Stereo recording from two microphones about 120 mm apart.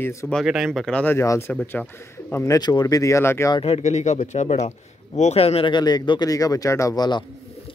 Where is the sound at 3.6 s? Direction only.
65° left (ahead or behind).